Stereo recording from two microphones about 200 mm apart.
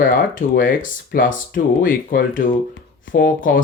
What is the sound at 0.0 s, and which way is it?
Speech, 45° left (ahead or behind).